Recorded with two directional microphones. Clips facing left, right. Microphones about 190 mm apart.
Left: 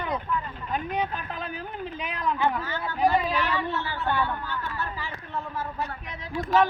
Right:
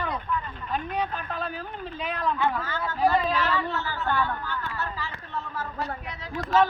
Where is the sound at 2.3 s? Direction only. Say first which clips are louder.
Left 1 dB; 15° left (ahead or behind).